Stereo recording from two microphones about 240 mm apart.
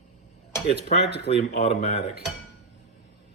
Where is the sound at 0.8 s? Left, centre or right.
Left.